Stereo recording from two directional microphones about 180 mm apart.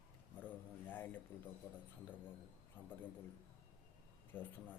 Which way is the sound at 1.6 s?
15° left (ahead or behind).